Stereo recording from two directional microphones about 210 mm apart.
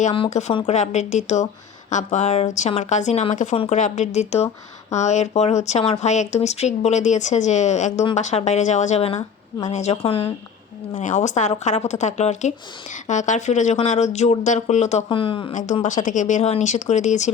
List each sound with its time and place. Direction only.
0.0 s a woman's voice: 30° left (ahead or behind)
15.5 s speech: 35° left (ahead or behind)